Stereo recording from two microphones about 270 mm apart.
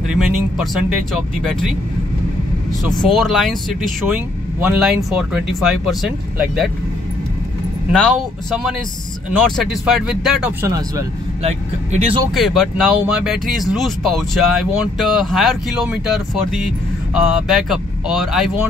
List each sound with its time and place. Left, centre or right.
0.1 s speech: centre
2.8 s speech: centre
7.9 s speech: centre
11.4 s speech: right
12.4 s speech: centre